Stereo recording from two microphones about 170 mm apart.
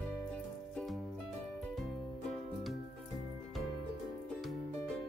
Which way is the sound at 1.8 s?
Centre (ahead or behind).